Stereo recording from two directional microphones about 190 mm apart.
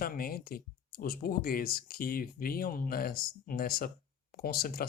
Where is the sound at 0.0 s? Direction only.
50° left (ahead or behind).